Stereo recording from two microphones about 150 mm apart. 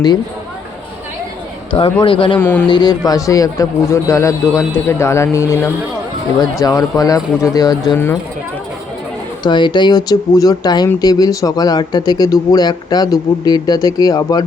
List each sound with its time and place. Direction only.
1.7 s a man's voice: 35° left (ahead or behind)
2.4 s a man's voice: 15° left (ahead or behind)
2.6 s a man's voice: 30° left (ahead or behind)
9.4 s speech: 30° left (ahead or behind)